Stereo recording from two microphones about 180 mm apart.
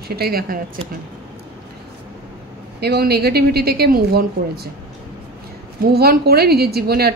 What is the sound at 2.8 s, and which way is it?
A woman's voice, 60° right (ahead or behind).